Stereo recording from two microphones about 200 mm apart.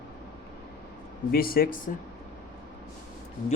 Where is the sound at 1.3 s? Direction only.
45° left (ahead or behind).